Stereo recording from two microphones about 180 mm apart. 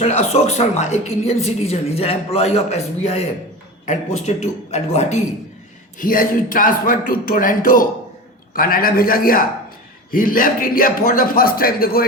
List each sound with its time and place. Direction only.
0.0 s a woman's voice: 35° left (ahead or behind)
6.0 s a man's voice: 50° left (ahead or behind)